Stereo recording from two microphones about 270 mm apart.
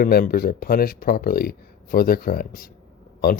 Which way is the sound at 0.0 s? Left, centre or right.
Left.